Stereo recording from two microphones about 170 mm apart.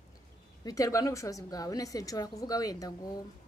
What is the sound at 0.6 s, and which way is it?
A woman's voice, 20° left (ahead or behind).